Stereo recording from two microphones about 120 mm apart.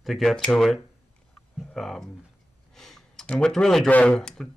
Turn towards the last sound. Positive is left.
turn(degrees=5)  # may be behind; listen again after turning